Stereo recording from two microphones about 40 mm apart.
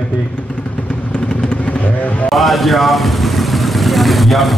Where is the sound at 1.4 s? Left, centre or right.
Left.